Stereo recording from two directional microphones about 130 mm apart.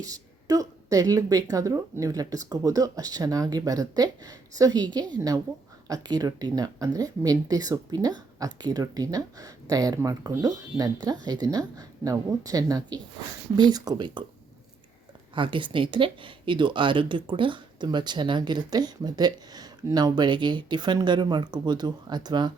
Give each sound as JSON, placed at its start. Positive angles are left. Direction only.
{"t": 0.0, "sound": "speech", "side_deg": -25}
{"t": 5.9, "sound": "speech", "side_deg": -30}
{"t": 15.4, "sound": "speech", "side_deg": -40}